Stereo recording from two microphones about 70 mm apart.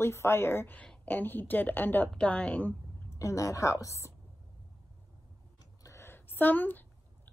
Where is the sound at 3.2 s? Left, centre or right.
Left.